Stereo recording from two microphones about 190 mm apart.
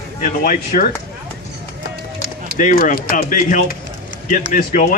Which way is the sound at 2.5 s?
40° left (ahead or behind).